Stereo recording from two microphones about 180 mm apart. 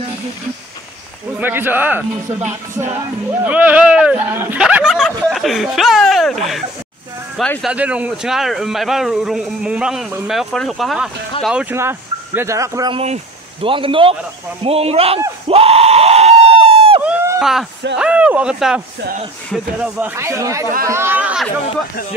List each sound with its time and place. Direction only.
1.4 s speech: 10° right (ahead or behind)
7.7 s speech: 10° right (ahead or behind)
11.7 s speech: 15° right (ahead or behind)
12.9 s speech: 35° right (ahead or behind)
15.4 s a sound: 35° right (ahead or behind)
17.0 s a sound: 10° right (ahead or behind)
17.4 s a man's voice: centre (ahead or behind)